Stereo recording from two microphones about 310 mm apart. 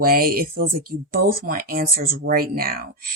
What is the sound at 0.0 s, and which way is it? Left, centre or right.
Speech, right.